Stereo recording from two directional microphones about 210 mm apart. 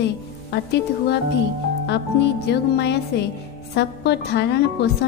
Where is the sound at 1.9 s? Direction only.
55° left (ahead or behind).